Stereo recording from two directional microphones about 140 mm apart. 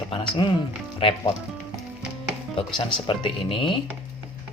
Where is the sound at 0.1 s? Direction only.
35° left (ahead or behind).